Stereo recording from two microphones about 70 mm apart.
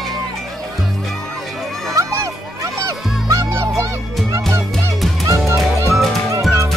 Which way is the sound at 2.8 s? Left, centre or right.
Right.